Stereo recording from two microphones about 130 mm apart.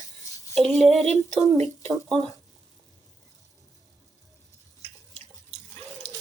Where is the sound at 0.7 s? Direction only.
Centre (ahead or behind).